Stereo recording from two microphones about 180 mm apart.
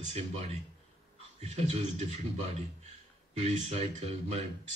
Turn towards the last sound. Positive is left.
turn(degrees=-35)  # may be behind; listen again after turning